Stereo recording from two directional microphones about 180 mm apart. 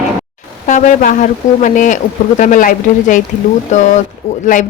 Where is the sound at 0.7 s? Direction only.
45° left (ahead or behind).